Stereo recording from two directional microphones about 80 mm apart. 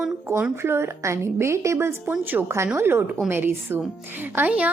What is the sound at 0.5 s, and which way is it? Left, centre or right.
A woman's voice, right.